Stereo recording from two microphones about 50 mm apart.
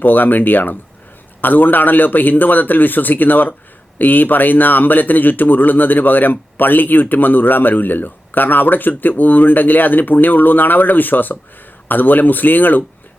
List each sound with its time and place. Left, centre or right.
0.0 s a man's voice: left